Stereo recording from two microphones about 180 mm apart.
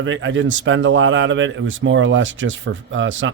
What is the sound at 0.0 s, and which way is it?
Speech, 90° right.